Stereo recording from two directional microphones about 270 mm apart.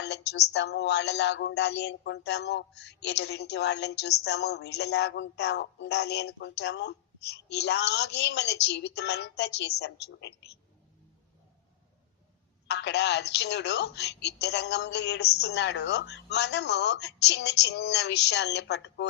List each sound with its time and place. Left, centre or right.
0.0 s speech: left
12.6 s speech: left